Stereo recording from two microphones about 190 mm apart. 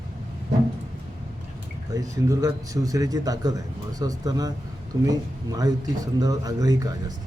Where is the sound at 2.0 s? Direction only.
20° right (ahead or behind).